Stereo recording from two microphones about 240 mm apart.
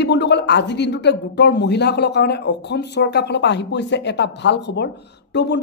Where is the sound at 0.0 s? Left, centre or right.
Left.